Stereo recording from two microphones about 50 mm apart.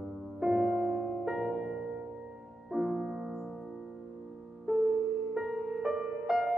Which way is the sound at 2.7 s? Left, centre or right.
Centre.